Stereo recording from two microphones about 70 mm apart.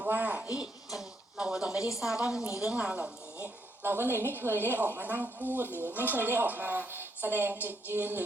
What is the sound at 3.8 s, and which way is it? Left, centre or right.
A woman's voice, right.